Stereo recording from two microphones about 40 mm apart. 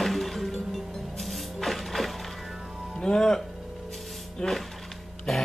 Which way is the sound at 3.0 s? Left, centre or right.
Centre.